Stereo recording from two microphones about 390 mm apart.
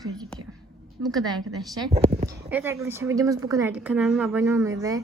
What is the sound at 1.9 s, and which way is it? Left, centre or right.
Speech, centre.